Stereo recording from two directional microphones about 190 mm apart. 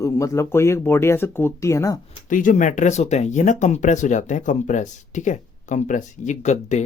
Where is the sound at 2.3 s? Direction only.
45° left (ahead or behind).